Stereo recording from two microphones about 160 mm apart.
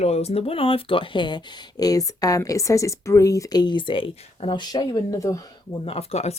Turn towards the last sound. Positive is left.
turn(degrees=40)  # may be behind; listen again after turning